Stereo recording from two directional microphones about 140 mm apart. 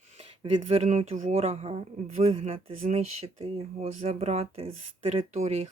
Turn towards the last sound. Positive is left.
turn(degrees=-50)  # may be behind; listen again after turning